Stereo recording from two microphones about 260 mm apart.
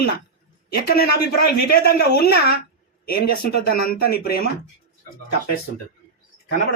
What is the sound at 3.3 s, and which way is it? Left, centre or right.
Speech, left.